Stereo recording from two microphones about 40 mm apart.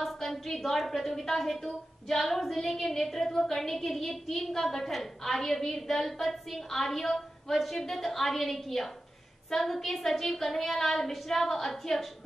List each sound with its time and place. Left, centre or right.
0.0 s a woman's voice: centre
7.5 s a woman's voice: centre